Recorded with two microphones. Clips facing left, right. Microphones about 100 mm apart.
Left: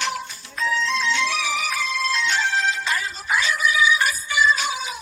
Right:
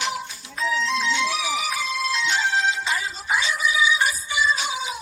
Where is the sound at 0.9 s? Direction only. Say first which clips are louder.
Even; 15° right (ahead or behind).